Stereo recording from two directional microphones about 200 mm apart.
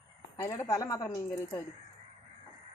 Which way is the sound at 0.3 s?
15° left (ahead or behind).